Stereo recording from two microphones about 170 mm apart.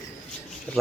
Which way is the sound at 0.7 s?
10° left (ahead or behind).